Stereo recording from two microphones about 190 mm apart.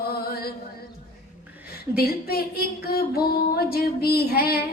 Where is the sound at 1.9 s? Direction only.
55° left (ahead or behind).